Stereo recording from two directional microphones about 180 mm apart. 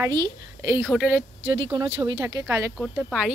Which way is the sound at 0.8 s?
10° right (ahead or behind).